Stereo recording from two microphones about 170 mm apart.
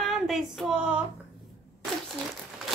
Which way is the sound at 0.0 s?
Centre (ahead or behind).